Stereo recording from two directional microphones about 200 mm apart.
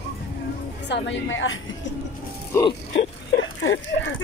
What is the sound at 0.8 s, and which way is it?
Speech, 60° left (ahead or behind).